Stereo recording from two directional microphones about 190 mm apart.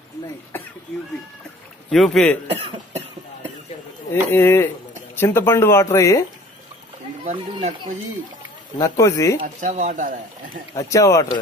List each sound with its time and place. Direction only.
1.9 s a man's voice: centre (ahead or behind)
2.4 s cough: 30° right (ahead or behind)
4.1 s speech: 10° left (ahead or behind)
8.7 s speech: 20° left (ahead or behind)
9.4 s speech: 40° right (ahead or behind)
10.7 s speech: 15° left (ahead or behind)